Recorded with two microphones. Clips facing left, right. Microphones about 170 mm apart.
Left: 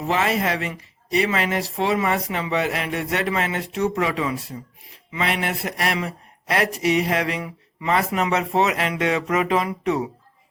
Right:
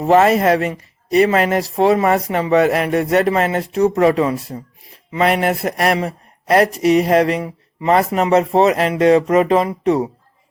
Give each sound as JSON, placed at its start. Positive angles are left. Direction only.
{"t": 0.0, "sound": "speech", "side_deg": -45}